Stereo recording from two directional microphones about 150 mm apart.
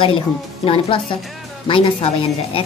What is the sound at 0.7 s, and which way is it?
A woman's voice, 35° left (ahead or behind).